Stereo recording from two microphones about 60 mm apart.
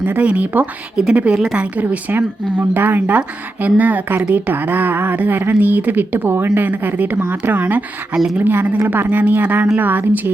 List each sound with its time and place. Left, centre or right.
0.0 s speech: right
8.1 s speech: centre
8.4 s speech: right